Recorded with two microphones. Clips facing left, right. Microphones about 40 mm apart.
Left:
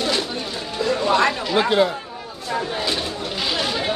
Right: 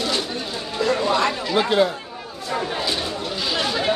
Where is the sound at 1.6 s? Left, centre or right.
Centre.